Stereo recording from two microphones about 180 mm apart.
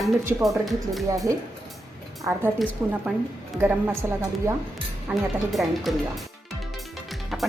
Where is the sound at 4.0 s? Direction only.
15° right (ahead or behind).